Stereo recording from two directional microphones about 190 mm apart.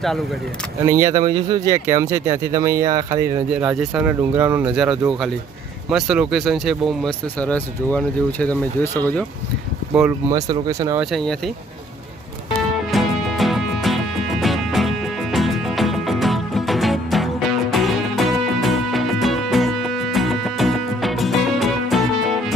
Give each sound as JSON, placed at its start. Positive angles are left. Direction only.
{"t": 0.9, "sound": "speech", "side_deg": -15}
{"t": 3.5, "sound": "speech", "side_deg": -5}
{"t": 9.9, "sound": "speech", "side_deg": -15}
{"t": 11.0, "sound": "speech", "side_deg": 0}
{"t": 12.9, "sound": "music", "side_deg": 0}